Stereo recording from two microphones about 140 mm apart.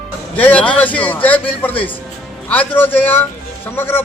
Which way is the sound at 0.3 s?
10° left (ahead or behind).